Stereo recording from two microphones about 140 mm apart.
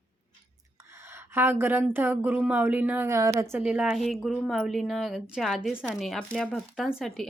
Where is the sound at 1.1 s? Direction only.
15° right (ahead or behind).